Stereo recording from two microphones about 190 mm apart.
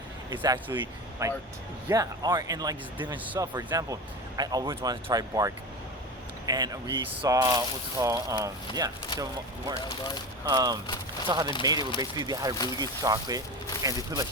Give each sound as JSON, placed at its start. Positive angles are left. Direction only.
{"t": 0.3, "sound": "speech", "side_deg": -20}
{"t": 10.4, "sound": "speech", "side_deg": -20}